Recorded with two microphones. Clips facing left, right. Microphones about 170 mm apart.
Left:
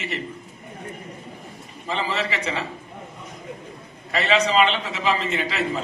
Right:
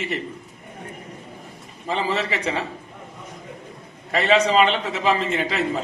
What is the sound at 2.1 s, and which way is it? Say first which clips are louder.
Speech: right 2 dB; 50° right (ahead or behind).